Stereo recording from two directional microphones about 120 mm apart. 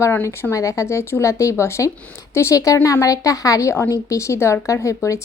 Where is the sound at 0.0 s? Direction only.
20° left (ahead or behind).